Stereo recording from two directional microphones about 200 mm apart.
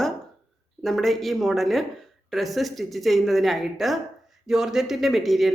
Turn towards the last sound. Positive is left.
turn(degrees=0)  # may be behind; listen again after turning